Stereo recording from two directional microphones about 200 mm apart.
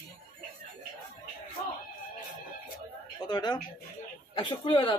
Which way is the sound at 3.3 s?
20° left (ahead or behind).